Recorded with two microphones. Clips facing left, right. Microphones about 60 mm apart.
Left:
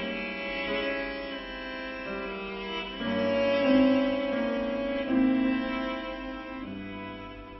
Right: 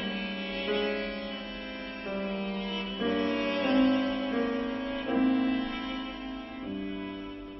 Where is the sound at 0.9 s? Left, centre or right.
Left.